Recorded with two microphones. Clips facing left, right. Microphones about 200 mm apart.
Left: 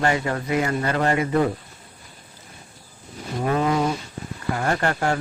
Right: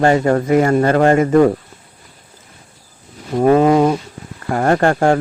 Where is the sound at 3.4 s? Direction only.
50° right (ahead or behind).